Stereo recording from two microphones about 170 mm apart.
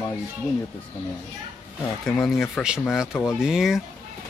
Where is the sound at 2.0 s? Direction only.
5° left (ahead or behind).